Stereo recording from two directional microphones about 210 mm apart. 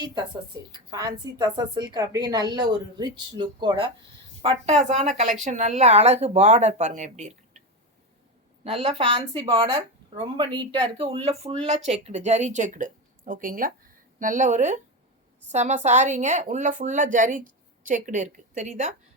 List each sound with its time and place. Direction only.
0.0 s a woman's voice: 20° right (ahead or behind)
4.4 s a woman's voice: 30° right (ahead or behind)
8.6 s a woman's voice: 30° right (ahead or behind)